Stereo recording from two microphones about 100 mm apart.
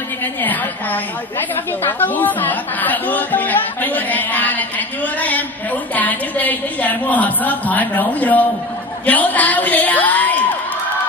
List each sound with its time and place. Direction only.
0.2 s a woman's voice: 20° left (ahead or behind)